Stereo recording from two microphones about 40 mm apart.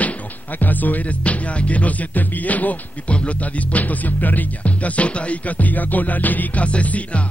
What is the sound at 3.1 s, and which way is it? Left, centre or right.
Music, left.